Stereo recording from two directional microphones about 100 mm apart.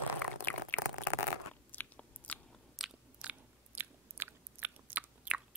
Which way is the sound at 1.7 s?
15° left (ahead or behind).